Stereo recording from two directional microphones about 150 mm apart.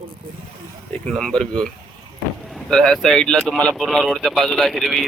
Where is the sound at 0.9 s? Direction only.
5° left (ahead or behind).